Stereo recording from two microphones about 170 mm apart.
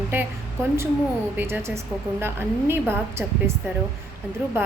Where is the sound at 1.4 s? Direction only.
15° right (ahead or behind).